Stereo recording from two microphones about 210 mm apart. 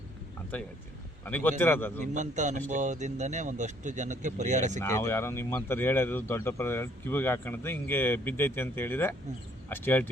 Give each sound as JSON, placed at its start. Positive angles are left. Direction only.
{"t": 1.2, "sound": "speech", "side_deg": 10}
{"t": 2.1, "sound": "speech", "side_deg": -35}
{"t": 4.8, "sound": "speech", "side_deg": 10}